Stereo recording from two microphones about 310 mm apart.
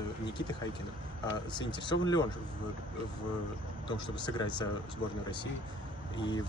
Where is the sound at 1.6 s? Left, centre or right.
Centre.